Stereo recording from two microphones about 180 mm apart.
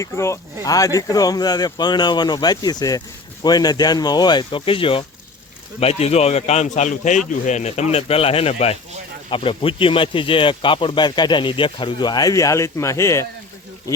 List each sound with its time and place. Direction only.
0.0 s speech: 15° left (ahead or behind)